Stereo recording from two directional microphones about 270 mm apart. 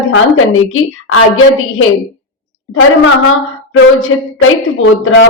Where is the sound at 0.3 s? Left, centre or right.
Left.